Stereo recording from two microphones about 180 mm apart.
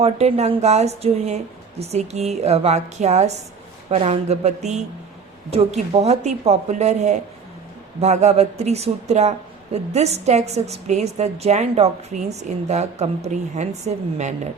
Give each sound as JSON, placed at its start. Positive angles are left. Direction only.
{"t": 0.0, "sound": "a woman's voice", "side_deg": -35}